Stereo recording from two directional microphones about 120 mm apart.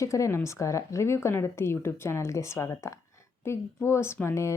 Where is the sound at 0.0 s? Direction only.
25° left (ahead or behind).